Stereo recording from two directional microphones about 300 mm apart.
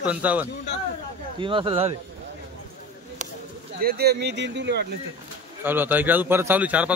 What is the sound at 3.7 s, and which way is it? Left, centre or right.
Speech, right.